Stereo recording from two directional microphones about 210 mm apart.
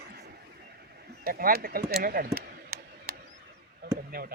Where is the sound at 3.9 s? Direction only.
45° right (ahead or behind).